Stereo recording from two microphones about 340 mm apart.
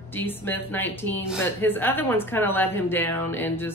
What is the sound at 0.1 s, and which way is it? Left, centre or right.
A woman's voice, centre.